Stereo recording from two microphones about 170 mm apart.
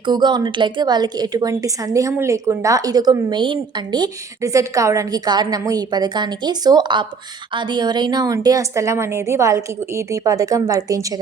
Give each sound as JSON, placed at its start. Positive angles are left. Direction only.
{"t": 0.0, "sound": "a woman's voice", "side_deg": -25}